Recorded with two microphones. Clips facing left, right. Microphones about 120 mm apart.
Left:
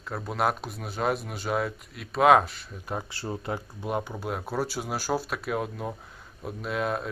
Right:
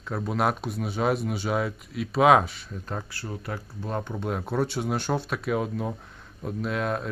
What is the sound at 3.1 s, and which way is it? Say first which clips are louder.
Speech: left 2 dB; 25° left (ahead or behind).